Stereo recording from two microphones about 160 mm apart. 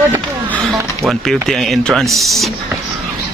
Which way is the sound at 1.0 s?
Centre (ahead or behind).